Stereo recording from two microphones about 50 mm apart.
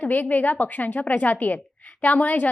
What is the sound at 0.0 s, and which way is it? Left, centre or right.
A woman's voice, left.